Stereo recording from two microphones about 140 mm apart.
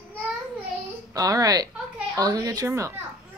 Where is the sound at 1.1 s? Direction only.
25° right (ahead or behind).